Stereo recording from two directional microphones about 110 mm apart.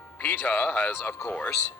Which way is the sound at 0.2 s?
15° left (ahead or behind).